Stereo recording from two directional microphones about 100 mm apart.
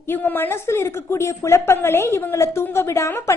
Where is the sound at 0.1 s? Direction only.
20° left (ahead or behind).